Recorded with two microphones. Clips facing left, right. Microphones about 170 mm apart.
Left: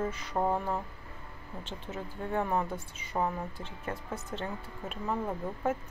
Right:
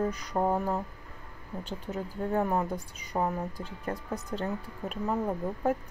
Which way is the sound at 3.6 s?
40° right (ahead or behind).